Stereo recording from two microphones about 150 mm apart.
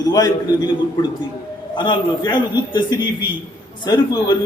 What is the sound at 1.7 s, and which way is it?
A man's voice, 30° left (ahead or behind).